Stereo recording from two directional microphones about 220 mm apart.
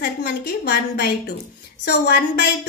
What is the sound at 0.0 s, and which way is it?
A woman's voice, 50° left (ahead or behind).